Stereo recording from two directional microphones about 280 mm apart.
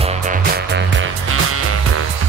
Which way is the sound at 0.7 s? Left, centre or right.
Right.